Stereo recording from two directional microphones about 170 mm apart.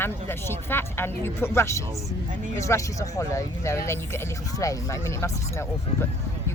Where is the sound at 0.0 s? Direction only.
15° left (ahead or behind).